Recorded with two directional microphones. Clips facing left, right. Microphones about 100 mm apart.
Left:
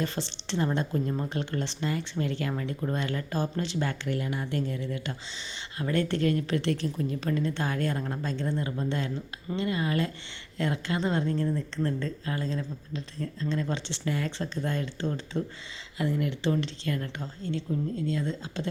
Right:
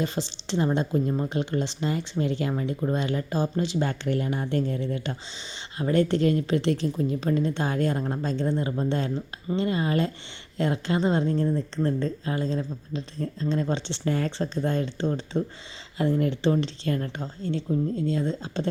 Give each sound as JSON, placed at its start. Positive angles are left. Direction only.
{"t": 0.0, "sound": "speech", "side_deg": -15}
{"t": 3.8, "sound": "speech", "side_deg": -30}
{"t": 5.8, "sound": "speech", "side_deg": -20}